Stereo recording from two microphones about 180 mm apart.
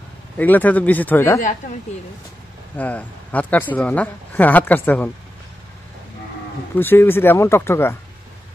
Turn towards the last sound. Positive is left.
turn(degrees=15)  # may be behind; listen again after turning